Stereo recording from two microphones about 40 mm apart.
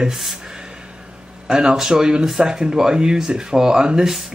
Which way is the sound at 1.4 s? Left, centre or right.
Centre.